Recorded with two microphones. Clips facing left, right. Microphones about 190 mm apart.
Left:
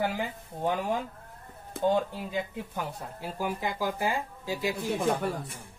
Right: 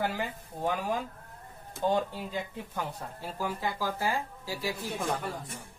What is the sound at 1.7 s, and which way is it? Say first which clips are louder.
Speech: left 3 dB; 60° left (ahead or behind).